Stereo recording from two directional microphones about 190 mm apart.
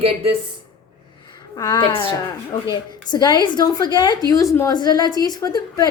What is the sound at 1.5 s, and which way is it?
A woman's voice, 20° left (ahead or behind).